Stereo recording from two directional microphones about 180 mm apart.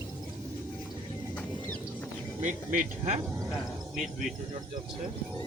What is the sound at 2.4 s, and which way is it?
Speech, 40° right (ahead or behind).